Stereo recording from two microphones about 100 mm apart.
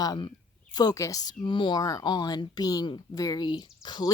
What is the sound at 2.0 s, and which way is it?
A woman's voice, 45° left (ahead or behind).